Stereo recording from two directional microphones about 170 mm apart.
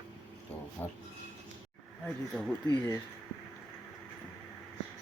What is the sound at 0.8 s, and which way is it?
Speech, 10° left (ahead or behind).